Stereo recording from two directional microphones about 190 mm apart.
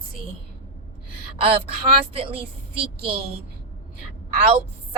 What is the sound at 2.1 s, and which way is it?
Speech, 30° right (ahead or behind).